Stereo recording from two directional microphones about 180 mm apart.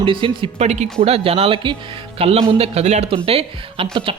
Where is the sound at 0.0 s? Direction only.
30° right (ahead or behind).